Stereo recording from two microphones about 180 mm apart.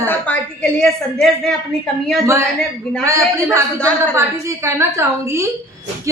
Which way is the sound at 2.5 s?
5° left (ahead or behind).